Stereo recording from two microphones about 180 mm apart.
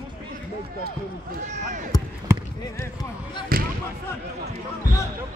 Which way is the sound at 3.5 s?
55° right (ahead or behind).